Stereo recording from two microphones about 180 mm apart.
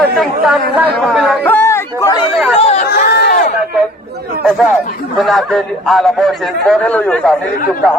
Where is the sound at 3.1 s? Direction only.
65° left (ahead or behind).